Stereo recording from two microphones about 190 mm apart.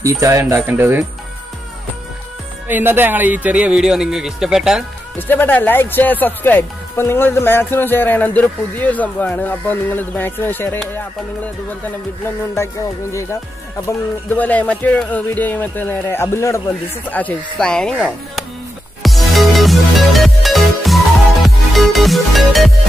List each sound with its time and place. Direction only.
0.0 s speech: 15° right (ahead or behind)
2.7 s speech: 10° right (ahead or behind)
5.3 s speech: 10° left (ahead or behind)
13.1 s speech: 15° left (ahead or behind); by 18.4 s 5° right (ahead or behind)
19.0 s music: centre (ahead or behind)